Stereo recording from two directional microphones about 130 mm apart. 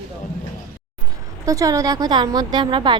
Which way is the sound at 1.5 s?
25° right (ahead or behind).